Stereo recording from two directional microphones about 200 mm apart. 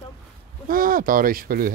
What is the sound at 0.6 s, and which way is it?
Speech, 45° right (ahead or behind).